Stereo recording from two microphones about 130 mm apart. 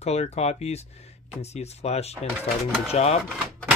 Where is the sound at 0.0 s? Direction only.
55° left (ahead or behind).